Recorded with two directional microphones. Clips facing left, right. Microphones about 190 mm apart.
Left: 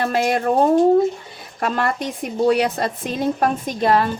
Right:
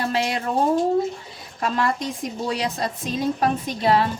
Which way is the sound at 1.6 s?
55° left (ahead or behind).